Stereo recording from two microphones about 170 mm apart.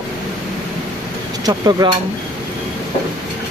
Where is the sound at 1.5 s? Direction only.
25° right (ahead or behind).